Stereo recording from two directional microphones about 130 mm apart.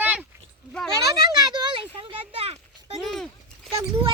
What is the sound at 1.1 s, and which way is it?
Speech, 30° right (ahead or behind).